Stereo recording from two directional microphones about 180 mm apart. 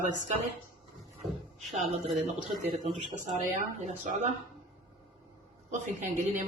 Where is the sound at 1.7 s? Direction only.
40° right (ahead or behind).